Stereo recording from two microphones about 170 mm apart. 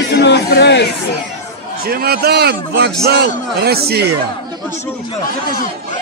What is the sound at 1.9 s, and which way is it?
A man's voice, 65° right (ahead or behind).